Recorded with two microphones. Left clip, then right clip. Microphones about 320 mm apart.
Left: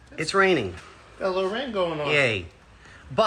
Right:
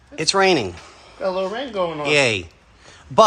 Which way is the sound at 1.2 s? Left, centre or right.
Right.